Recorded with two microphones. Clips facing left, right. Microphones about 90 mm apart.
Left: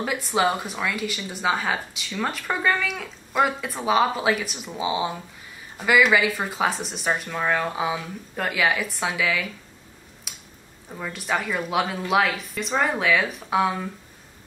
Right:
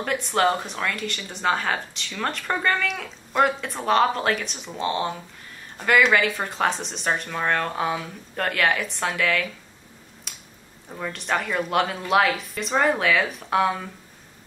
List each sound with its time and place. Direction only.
0.0 s speech: 5° left (ahead or behind)
10.3 s a sound: 5° left (ahead or behind)
10.9 s speech: centre (ahead or behind)